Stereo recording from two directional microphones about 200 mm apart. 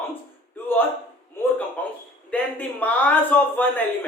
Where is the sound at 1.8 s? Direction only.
10° left (ahead or behind).